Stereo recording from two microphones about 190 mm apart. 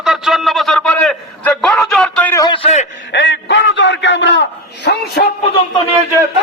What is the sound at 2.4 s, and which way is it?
Speech, 30° left (ahead or behind).